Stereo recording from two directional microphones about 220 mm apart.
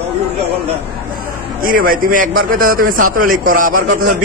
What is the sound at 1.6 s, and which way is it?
A man's voice, 40° right (ahead or behind).